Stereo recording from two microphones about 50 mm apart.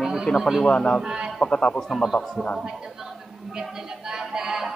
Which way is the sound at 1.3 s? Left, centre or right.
Centre.